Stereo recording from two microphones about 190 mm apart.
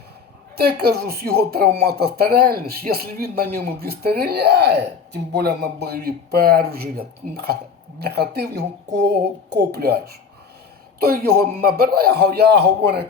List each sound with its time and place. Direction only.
0.5 s a man's voice: 55° right (ahead or behind)